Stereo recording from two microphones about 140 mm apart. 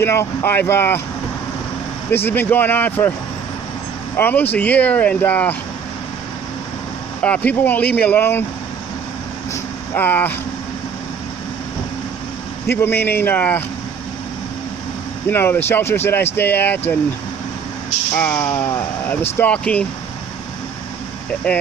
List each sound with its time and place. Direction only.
0.0 s speech: 15° left (ahead or behind)
2.0 s speech: 15° left (ahead or behind)
4.2 s speech: 15° left (ahead or behind)
7.2 s speech: 10° left (ahead or behind)
9.5 s vehicle: 15° left (ahead or behind)
12.6 s speech: 15° left (ahead or behind)
15.3 s speech: 15° left (ahead or behind)
18.1 s speech: 10° left (ahead or behind)